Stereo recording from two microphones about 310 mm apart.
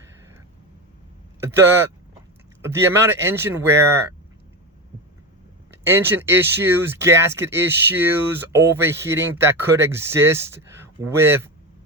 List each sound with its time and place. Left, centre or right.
1.4 s speech: centre
5.7 s speech: centre